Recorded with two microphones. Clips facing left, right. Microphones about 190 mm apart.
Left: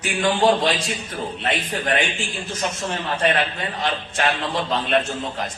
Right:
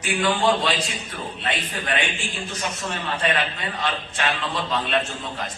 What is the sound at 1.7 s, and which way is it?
Speech, 40° left (ahead or behind).